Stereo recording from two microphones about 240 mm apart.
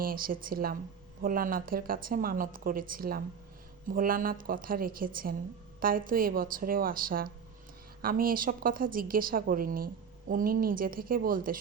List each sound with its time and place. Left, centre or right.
0.0 s a woman's voice: right